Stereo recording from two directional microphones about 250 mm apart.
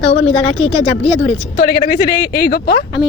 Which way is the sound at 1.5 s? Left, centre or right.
Left.